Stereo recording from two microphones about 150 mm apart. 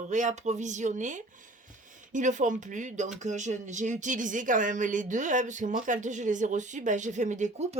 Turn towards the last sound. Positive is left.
turn(degrees=-55)  # may be behind; listen again after turning